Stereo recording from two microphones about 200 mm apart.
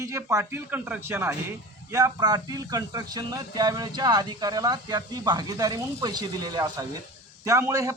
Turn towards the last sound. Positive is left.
turn(degrees=-15)  # may be behind; listen again after turning